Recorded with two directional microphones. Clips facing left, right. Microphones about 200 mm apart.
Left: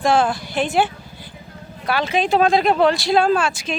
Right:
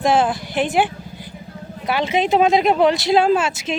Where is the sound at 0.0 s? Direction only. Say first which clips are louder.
Even; 20° right (ahead or behind).